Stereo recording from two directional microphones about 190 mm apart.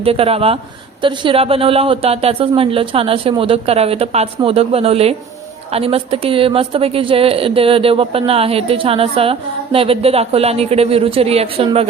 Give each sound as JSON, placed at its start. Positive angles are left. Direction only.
{"t": 0.0, "sound": "a woman's voice", "side_deg": -30}